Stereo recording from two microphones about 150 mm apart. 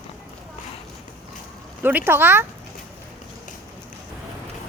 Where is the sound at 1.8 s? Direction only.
15° right (ahead or behind).